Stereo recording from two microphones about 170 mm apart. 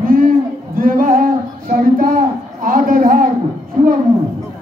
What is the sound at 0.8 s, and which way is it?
Singing, 55° right (ahead or behind).